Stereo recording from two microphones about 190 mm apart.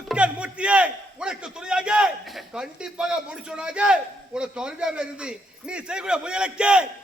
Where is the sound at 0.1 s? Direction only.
5° right (ahead or behind).